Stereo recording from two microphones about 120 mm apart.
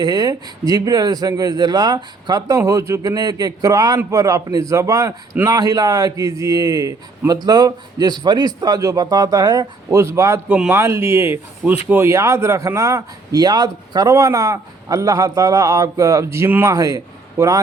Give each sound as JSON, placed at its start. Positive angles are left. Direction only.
{"t": 0.0, "sound": "speech", "side_deg": -35}
{"t": 9.9, "sound": "a man's voice", "side_deg": -25}